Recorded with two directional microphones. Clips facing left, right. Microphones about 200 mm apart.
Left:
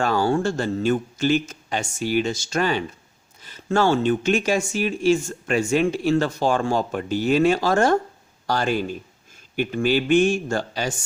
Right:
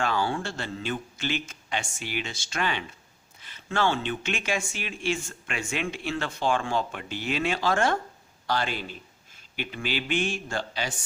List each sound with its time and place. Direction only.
0.0 s a man's voice: 45° left (ahead or behind)